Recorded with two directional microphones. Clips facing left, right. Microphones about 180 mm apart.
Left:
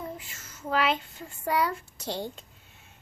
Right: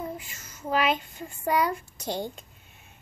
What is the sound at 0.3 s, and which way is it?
A child's voice, 15° right (ahead or behind).